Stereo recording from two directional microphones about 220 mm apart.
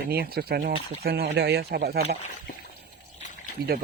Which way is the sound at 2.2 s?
40° left (ahead or behind).